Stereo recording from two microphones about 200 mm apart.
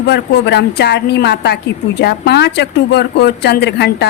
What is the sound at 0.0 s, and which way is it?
Speech, 55° left (ahead or behind).